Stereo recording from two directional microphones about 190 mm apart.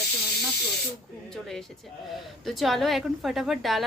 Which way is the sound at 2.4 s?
Centre (ahead or behind).